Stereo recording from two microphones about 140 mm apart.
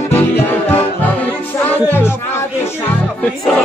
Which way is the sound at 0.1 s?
10° left (ahead or behind).